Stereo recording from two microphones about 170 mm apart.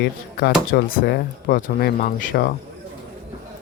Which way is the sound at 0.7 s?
60° left (ahead or behind).